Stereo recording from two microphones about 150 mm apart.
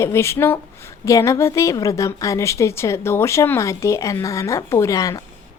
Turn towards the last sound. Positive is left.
turn(degrees=20)  # may be behind; listen again after turning